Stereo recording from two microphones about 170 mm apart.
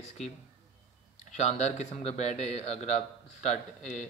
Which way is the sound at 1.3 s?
40° left (ahead or behind).